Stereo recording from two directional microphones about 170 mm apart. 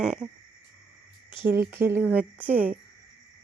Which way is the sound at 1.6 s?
15° right (ahead or behind).